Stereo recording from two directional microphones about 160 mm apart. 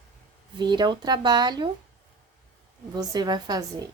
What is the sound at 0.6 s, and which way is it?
Speech, 30° right (ahead or behind).